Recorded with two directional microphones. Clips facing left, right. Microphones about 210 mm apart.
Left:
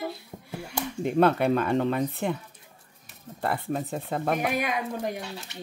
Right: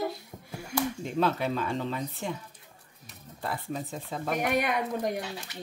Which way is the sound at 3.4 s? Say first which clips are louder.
Left 5 dB; 60° left (ahead or behind).